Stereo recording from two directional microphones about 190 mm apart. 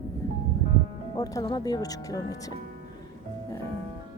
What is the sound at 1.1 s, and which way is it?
Speech, 20° left (ahead or behind).